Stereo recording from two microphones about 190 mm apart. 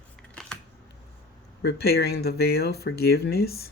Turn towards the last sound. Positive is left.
turn(degrees=55)  # may be behind; listen again after turning